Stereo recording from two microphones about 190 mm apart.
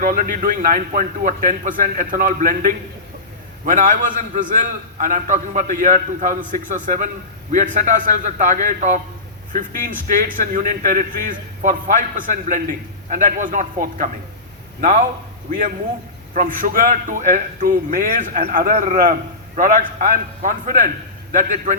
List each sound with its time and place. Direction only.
0.0 s a man's voice: 45° right (ahead or behind)